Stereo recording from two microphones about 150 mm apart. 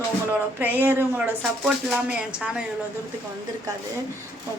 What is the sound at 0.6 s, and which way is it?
Speech, 10° right (ahead or behind).